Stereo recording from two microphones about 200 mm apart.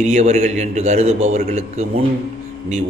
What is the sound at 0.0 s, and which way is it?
A man's voice, 35° right (ahead or behind).